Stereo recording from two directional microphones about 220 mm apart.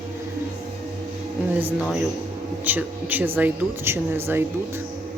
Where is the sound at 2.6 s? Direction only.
10° right (ahead or behind).